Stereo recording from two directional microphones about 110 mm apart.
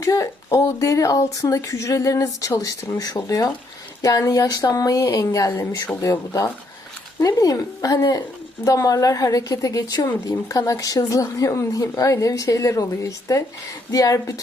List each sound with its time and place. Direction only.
0.0 s a woman's voice: 30° left (ahead or behind)